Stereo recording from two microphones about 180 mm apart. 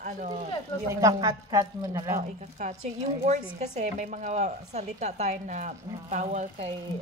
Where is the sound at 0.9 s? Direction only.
20° right (ahead or behind).